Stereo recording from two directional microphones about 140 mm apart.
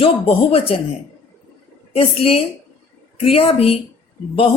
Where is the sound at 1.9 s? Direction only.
45° left (ahead or behind).